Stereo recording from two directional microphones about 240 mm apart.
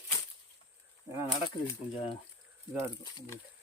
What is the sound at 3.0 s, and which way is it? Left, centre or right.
Speech, centre.